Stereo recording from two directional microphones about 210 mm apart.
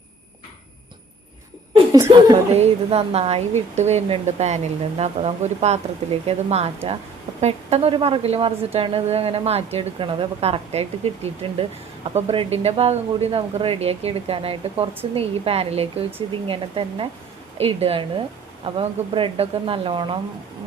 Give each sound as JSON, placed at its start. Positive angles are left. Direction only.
{"t": 1.7, "sound": "laughter", "side_deg": -20}
{"t": 2.5, "sound": "speech", "side_deg": -30}